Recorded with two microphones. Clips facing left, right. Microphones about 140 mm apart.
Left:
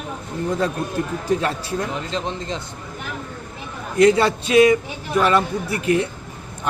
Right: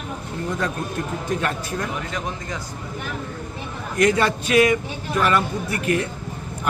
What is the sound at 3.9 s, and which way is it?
Speech, 25° left (ahead or behind).